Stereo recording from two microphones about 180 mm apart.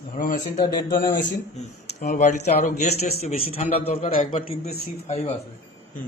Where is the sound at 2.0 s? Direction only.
45° left (ahead or behind).